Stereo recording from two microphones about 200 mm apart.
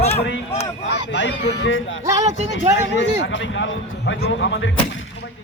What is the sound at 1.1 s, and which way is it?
Speech, 65° left (ahead or behind).